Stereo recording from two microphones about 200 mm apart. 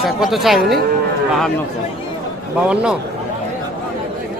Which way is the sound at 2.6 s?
5° right (ahead or behind).